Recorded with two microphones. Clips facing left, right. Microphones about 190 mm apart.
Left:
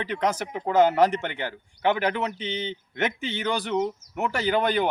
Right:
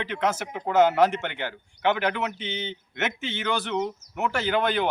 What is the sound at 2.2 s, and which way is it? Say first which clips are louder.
Speech: left 1 dB; 35° left (ahead or behind).